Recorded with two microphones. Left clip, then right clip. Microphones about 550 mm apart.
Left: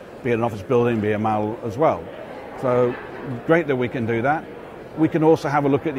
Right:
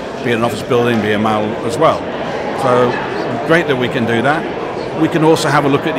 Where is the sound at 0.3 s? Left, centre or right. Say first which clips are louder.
Right 5 dB; left.